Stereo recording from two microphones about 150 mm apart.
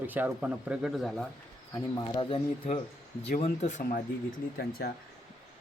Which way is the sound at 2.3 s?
40° left (ahead or behind).